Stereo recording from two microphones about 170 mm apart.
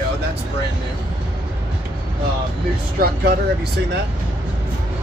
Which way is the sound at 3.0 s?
65° right (ahead or behind).